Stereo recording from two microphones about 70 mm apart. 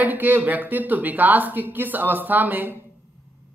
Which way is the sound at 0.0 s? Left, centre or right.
Right.